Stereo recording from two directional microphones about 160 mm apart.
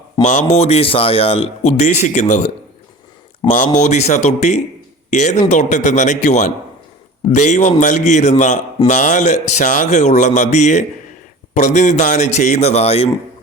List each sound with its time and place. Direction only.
0.2 s a man's voice: 50° left (ahead or behind)
3.5 s a man's voice: 50° left (ahead or behind)